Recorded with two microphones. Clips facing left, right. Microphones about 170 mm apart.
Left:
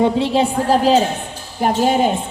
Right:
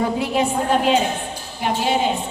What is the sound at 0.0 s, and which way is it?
A woman's voice, 30° left (ahead or behind).